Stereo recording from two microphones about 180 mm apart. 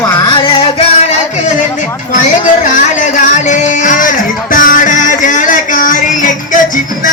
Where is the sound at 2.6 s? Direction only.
45° left (ahead or behind).